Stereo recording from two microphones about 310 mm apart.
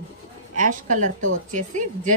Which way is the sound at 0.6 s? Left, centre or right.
Right.